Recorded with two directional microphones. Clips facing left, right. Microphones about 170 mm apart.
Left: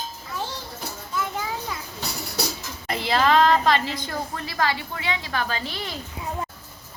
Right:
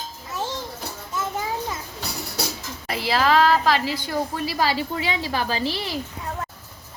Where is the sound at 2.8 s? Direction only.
5° right (ahead or behind).